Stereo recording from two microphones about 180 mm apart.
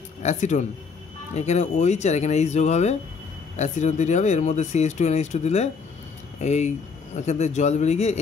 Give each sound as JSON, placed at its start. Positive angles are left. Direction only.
{"t": 0.2, "sound": "speech", "side_deg": 40}